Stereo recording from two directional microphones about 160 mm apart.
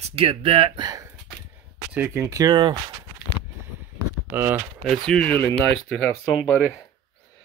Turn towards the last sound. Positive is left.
turn(degrees=10)  # may be behind; listen again after turning